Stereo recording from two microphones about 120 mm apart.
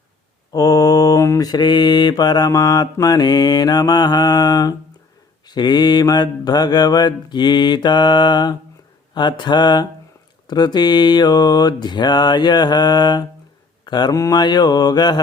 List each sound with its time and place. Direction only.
0.5 s mantra: 30° left (ahead or behind)